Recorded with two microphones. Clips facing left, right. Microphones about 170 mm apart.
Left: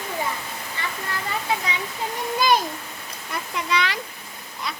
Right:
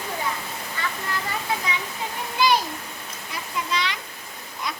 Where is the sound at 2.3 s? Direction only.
50° left (ahead or behind).